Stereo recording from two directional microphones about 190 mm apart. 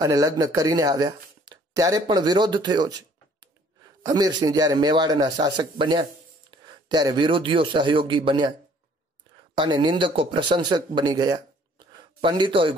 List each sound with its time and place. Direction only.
0.0 s a man's voice: 20° right (ahead or behind)
9.6 s speech: 25° right (ahead or behind)